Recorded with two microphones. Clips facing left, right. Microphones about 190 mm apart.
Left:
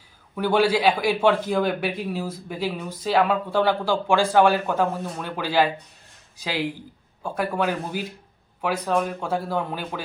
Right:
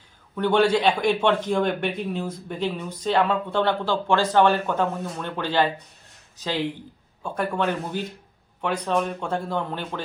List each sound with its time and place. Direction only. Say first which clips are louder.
0.3 s a man's voice: right 1 dB; 5° left (ahead or behind)